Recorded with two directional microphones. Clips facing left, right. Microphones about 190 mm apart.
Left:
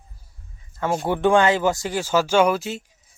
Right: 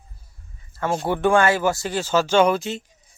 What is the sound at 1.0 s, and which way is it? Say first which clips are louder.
Speech: left 1 dB; 15° left (ahead or behind).